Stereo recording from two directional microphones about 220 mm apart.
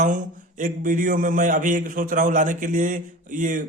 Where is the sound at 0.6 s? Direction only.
35° right (ahead or behind).